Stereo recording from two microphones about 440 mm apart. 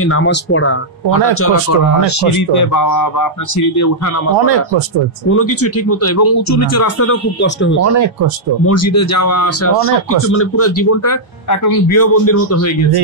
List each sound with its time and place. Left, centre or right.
0.0 s speech: left
5.3 s speech: left
7.8 s speech: right
8.6 s speech: left